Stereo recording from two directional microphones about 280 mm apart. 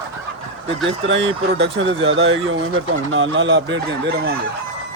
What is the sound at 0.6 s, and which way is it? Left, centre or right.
Speech, right.